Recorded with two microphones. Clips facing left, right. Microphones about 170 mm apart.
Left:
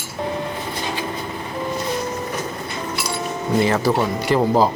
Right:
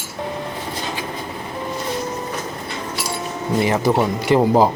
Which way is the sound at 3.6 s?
15° right (ahead or behind).